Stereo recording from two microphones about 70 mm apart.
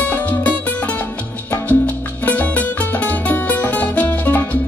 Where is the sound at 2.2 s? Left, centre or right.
Left.